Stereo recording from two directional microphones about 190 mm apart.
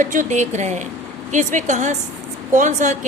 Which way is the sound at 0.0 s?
40° right (ahead or behind).